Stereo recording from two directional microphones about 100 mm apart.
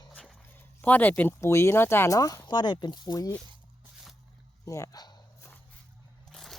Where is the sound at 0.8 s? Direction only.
15° left (ahead or behind).